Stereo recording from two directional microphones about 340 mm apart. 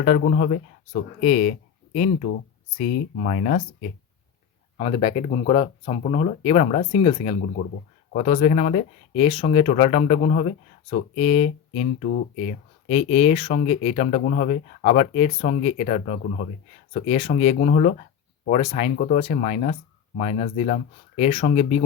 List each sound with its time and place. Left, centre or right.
0.0 s speech: left
3.2 s speech: left